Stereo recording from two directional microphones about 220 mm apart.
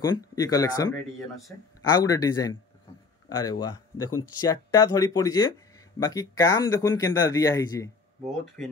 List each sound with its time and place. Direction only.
0.0 s speech: 15° left (ahead or behind)